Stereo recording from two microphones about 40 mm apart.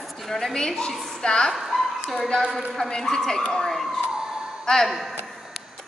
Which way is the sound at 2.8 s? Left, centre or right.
Centre.